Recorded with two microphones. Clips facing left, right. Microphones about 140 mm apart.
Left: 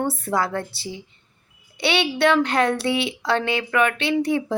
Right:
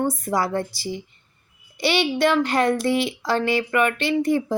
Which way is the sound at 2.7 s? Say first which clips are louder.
Right 2 dB; 70° left (ahead or behind).